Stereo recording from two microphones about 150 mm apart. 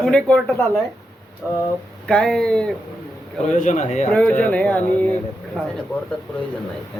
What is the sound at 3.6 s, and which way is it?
Speech, 50° left (ahead or behind).